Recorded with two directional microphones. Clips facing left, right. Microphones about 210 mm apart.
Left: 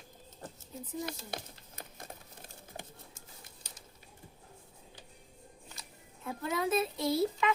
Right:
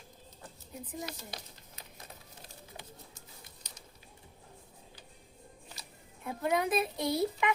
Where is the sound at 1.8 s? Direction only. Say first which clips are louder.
Left 5 dB; 50° left (ahead or behind).